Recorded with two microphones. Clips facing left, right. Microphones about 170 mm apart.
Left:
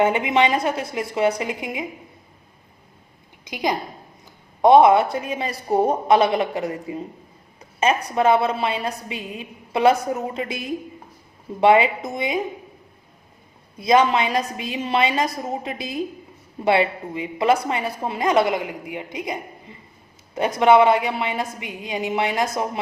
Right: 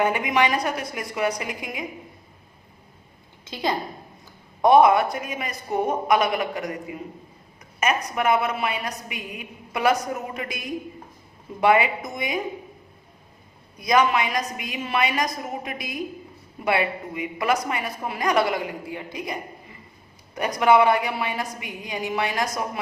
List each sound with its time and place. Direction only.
0.0 s a woman's voice: 25° left (ahead or behind)
3.4 s a woman's voice: 15° left (ahead or behind)
13.7 s a woman's voice: 25° left (ahead or behind)